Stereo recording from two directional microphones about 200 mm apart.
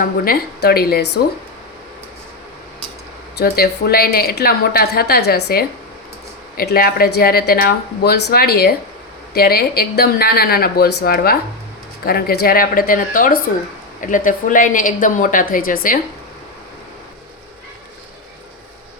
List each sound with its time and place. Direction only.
0.0 s a woman's voice: 50° left (ahead or behind)
3.3 s a woman's voice: 50° left (ahead or behind)